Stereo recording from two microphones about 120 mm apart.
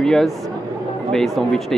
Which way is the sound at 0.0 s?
5° left (ahead or behind).